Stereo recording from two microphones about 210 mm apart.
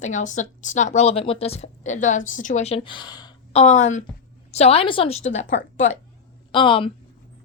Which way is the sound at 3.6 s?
35° left (ahead or behind).